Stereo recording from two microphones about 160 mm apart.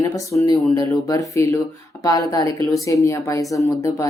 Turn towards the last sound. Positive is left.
turn(degrees=20)  # may be behind; listen again after turning